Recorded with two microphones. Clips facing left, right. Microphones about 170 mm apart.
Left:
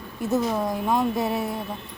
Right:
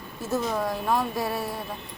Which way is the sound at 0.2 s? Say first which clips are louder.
Left 3 dB; 20° left (ahead or behind).